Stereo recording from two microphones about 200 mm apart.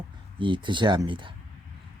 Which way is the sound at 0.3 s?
25° right (ahead or behind).